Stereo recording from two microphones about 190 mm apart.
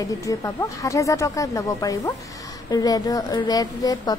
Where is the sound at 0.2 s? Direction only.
15° left (ahead or behind).